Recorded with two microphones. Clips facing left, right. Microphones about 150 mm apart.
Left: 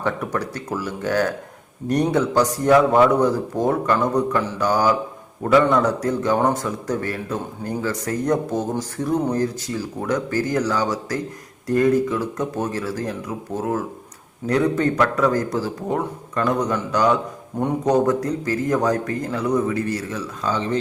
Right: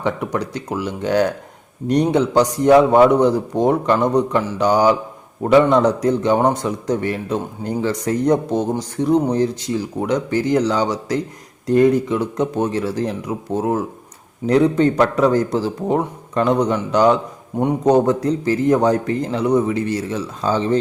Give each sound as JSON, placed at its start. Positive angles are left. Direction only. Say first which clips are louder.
{"t": 0.3, "sound": "a man's voice", "louder": "right 3 dB", "side_deg": -20}